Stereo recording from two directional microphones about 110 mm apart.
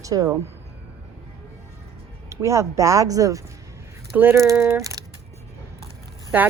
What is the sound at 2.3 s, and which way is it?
Speech, 25° right (ahead or behind).